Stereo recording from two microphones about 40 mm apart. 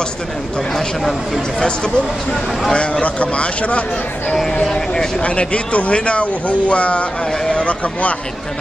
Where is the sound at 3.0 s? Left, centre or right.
Left.